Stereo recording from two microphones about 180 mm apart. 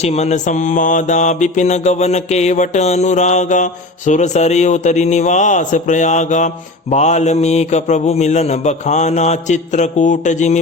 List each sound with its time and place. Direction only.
0.0 s mantra: 35° left (ahead or behind)